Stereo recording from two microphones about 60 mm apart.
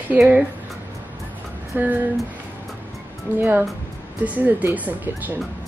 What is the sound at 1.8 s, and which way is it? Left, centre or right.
Speech, right.